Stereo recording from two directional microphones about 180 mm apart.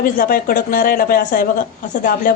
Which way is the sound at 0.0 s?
55° left (ahead or behind).